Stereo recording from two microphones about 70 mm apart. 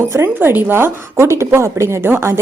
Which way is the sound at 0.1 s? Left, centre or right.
Right.